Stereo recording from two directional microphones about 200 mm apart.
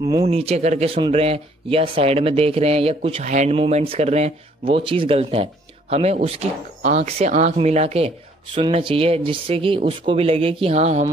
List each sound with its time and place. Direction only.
0.0 s speech: 20° right (ahead or behind)